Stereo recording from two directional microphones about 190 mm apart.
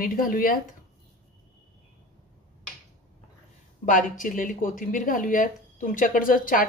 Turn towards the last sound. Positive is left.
turn(degrees=45)  # may be behind; listen again after turning